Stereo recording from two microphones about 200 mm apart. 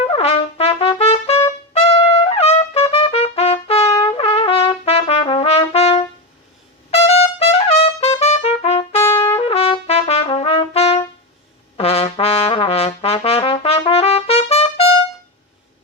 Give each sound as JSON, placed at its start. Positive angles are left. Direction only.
{"t": 0.0, "sound": "trumpet", "side_deg": 30}
{"t": 9.0, "sound": "trumpet", "side_deg": 10}
{"t": 9.3, "sound": "trumpet", "side_deg": 30}
{"t": 11.8, "sound": "brass instrument", "side_deg": 30}